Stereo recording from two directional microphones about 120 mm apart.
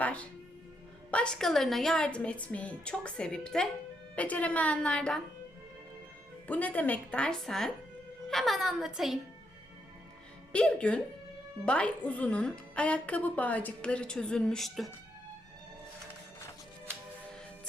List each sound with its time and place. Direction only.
0.0 s music: 10° left (ahead or behind)
1.1 s a woman's voice: 10° left (ahead or behind)
6.5 s a woman's voice: 15° left (ahead or behind); by 9.1 s 5° right (ahead or behind)
10.5 s a woman's voice: 10° left (ahead or behind)